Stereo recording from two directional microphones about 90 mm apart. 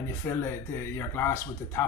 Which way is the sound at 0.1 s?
25° left (ahead or behind).